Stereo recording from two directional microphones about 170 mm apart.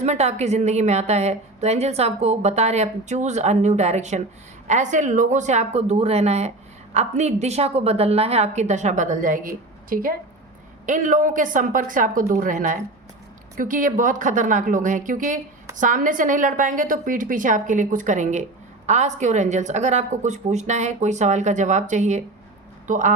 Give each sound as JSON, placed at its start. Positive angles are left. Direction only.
{"t": 0.0, "sound": "a woman's voice", "side_deg": -40}